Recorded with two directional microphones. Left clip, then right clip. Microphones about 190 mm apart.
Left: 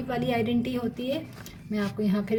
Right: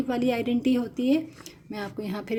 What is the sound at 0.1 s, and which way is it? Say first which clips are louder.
A woman's voice: left 1 dB; 45° right (ahead or behind).